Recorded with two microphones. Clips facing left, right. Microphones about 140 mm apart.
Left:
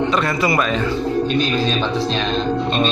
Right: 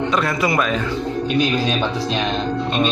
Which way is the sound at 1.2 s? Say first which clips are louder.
Even; 15° right (ahead or behind).